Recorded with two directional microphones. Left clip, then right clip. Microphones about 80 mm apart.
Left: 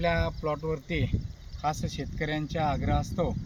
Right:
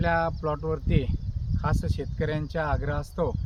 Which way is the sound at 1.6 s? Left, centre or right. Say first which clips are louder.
Left 1 dB; right.